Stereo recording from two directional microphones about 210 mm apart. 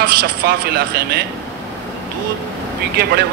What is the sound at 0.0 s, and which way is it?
Speech, 45° right (ahead or behind).